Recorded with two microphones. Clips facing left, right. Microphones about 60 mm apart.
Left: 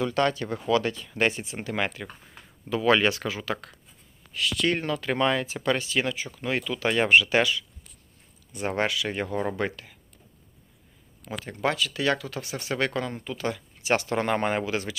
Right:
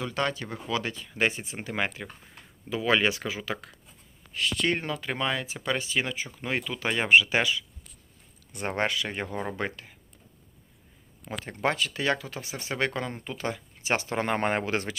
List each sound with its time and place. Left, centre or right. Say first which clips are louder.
0.0 s speech: left 5 dB; centre
1.6 s speech: left 1 dB; centre
4.3 s speech: left 1 dB; right
5.0 s speech: left 6 dB; centre
5.6 s speech: left 3 dB; centre
8.7 s speech: left 1 dB; right
9.0 s speech: left 4 dB; centre
11.3 s speech: left 1 dB; right
14.4 s speech: even; right